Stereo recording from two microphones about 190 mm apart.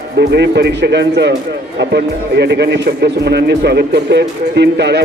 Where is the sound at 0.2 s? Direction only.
65° right (ahead or behind).